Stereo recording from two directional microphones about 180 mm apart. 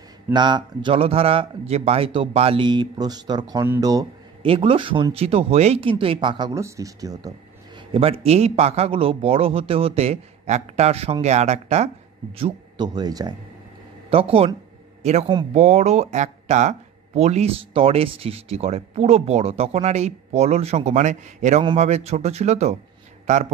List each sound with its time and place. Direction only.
0.3 s a man's voice: 25° right (ahead or behind)
4.5 s a man's voice: 30° right (ahead or behind)
7.9 s speech: 35° right (ahead or behind)
12.4 s a man's voice: 30° right (ahead or behind)